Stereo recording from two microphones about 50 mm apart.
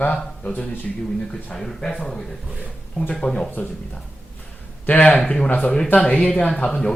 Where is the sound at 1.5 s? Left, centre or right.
Centre.